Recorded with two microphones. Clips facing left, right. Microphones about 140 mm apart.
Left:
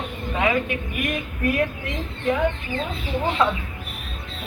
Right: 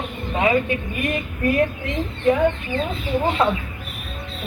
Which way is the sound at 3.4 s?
20° right (ahead or behind).